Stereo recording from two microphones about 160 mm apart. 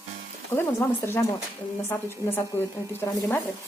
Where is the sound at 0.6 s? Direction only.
15° left (ahead or behind).